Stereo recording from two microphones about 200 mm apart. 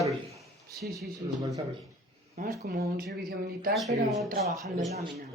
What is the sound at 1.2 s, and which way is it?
Speech, 25° right (ahead or behind).